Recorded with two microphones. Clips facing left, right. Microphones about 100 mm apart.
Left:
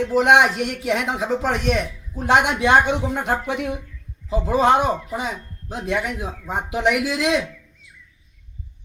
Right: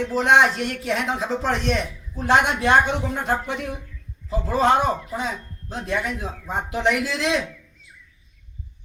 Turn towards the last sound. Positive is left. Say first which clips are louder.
# left 3 dB
turn(degrees=5)  # may be behind; listen again after turning